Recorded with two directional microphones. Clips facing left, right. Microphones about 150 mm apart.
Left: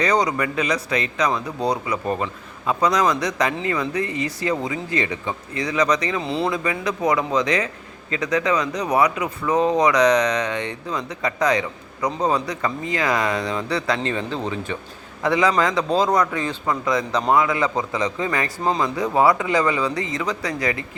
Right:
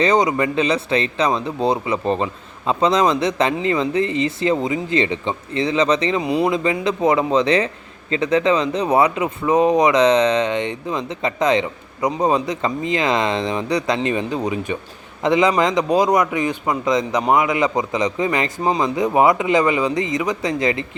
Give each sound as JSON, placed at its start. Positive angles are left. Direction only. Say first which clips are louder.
{"t": 0.0, "sound": "speech", "louder": "right 4 dB", "side_deg": -20}
{"t": 6.2, "sound": "speech", "louder": "right 5 dB", "side_deg": -15}